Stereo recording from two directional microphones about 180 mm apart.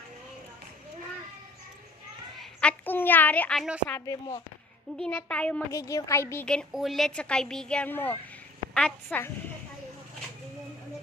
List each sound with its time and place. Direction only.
2.4 s a sound: 5° left (ahead or behind)
3.9 s speech: 15° left (ahead or behind)
4.9 s speech: 5° left (ahead or behind)
5.7 s a woman's voice: 15° left (ahead or behind)